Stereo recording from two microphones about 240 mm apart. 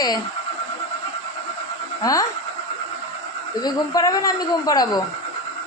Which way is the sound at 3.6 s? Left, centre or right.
Centre.